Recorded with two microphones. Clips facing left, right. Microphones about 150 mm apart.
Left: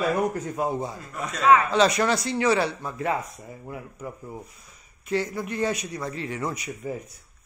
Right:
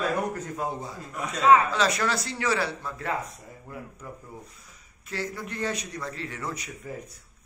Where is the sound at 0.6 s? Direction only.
20° left (ahead or behind).